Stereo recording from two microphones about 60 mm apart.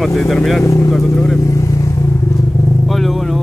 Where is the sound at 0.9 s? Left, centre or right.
Centre.